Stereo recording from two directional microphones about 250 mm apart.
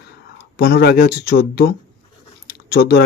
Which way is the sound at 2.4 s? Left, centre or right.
Left.